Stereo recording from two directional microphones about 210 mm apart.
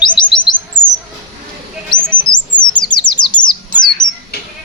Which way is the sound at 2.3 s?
20° left (ahead or behind).